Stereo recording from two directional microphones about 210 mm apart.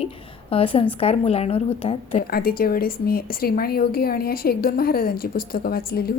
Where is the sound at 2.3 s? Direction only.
45° left (ahead or behind).